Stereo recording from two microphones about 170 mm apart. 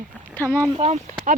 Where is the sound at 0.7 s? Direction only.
40° right (ahead or behind).